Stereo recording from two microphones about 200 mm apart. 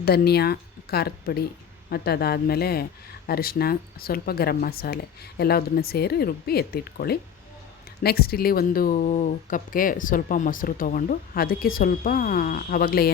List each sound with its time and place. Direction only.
0.0 s speech: 50° left (ahead or behind)